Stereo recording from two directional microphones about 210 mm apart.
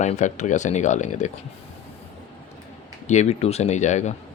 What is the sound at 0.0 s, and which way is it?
Speech, 35° left (ahead or behind).